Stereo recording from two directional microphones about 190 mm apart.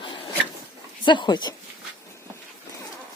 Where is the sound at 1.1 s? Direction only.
25° left (ahead or behind).